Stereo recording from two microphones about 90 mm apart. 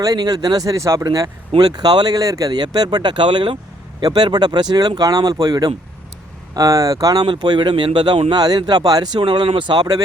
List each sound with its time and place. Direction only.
0.0 s speech: 45° right (ahead or behind); by 3.6 s 60° right (ahead or behind)
4.0 s speech: 50° right (ahead or behind)
7.3 s speech: 60° right (ahead or behind)
9.2 s speech: 65° right (ahead or behind)